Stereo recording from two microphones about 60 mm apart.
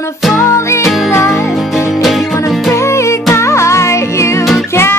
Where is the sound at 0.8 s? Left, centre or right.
Centre.